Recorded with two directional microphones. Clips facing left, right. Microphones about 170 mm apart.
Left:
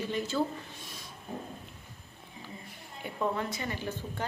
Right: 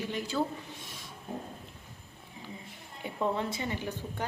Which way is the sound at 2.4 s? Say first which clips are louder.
Right 1 dB; 20° right (ahead or behind).